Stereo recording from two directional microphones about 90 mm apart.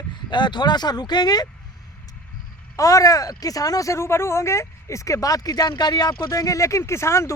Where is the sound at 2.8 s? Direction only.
40° left (ahead or behind).